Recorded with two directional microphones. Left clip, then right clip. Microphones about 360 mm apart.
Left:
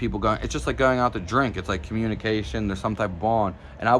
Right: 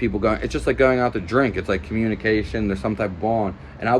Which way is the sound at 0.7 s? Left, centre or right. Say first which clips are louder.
Right 3 dB; centre.